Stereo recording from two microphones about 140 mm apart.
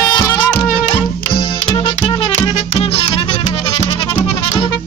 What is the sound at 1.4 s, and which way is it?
Music, 35° left (ahead or behind).